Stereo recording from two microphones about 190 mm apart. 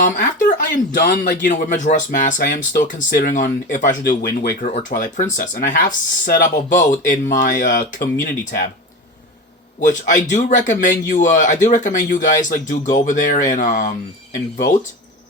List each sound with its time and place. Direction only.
0.2 s speech: 45° left (ahead or behind)
9.8 s speech: 40° left (ahead or behind)